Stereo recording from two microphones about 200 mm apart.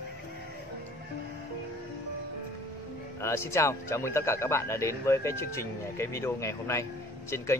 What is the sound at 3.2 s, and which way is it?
A man's voice, 15° left (ahead or behind).